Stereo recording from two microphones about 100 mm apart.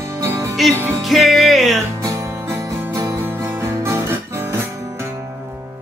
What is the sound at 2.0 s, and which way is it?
Music, 30° right (ahead or behind).